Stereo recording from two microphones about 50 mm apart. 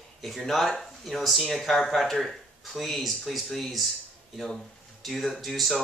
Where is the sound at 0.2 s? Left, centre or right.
Centre.